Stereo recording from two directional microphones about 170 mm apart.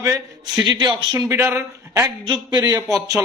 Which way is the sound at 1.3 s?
15° right (ahead or behind).